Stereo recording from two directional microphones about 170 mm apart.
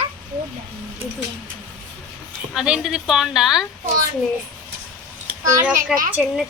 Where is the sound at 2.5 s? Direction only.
5° right (ahead or behind).